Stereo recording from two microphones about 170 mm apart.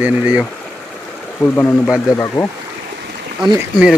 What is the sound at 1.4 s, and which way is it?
Speech, 10° left (ahead or behind).